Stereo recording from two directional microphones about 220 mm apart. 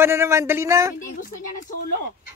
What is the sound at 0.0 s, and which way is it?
Speech, 10° right (ahead or behind).